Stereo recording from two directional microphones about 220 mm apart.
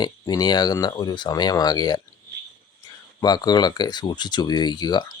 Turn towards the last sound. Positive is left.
turn(degrees=20)  # may be behind; listen again after turning